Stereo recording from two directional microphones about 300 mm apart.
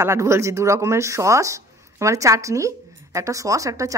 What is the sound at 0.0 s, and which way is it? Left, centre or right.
Speech, centre.